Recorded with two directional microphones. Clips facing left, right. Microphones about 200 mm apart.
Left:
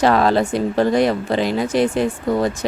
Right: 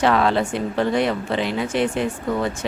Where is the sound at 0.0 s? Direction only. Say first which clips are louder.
Left 3 dB; 40° left (ahead or behind).